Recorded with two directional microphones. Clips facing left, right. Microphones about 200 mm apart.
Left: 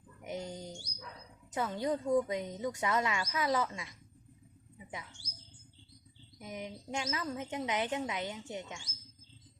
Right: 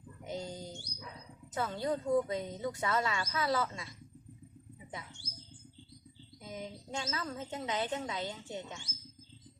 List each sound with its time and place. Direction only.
0.3 s bird: 20° left (ahead or behind)
1.5 s a woman's voice: 15° left (ahead or behind)
6.4 s a woman's voice: 15° left (ahead or behind)